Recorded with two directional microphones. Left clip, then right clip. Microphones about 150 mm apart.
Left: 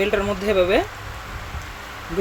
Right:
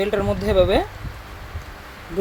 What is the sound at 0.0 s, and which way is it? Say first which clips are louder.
Speech: left 1 dB; 30° right (ahead or behind).